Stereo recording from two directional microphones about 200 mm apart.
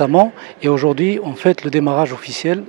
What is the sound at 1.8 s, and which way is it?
Speech, 25° right (ahead or behind).